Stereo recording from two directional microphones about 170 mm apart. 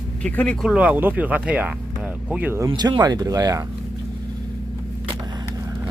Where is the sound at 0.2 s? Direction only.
5° left (ahead or behind).